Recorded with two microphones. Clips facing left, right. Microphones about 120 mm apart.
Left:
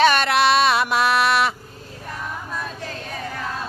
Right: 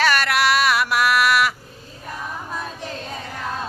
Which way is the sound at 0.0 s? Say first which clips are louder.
Left 3 dB; 20° left (ahead or behind).